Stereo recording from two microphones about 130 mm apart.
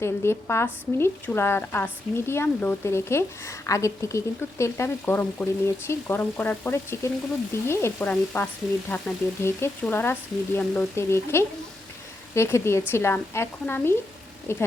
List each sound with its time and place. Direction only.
0.0 s a woman's voice: 20° left (ahead or behind)